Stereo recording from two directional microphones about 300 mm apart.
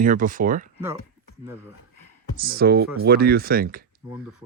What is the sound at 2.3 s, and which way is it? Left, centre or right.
Speech, right.